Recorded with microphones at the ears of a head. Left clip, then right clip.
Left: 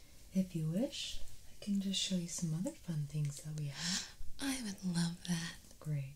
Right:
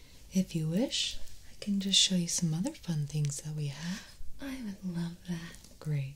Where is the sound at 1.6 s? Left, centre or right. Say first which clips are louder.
Right 11 dB; right.